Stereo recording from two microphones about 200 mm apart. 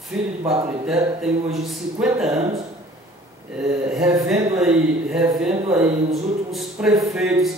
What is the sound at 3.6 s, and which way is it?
A woman's voice, 5° right (ahead or behind).